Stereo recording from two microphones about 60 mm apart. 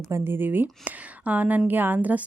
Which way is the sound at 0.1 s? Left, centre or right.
Right.